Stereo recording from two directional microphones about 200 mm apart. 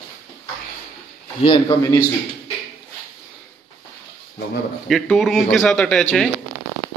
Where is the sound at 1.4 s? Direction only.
20° left (ahead or behind).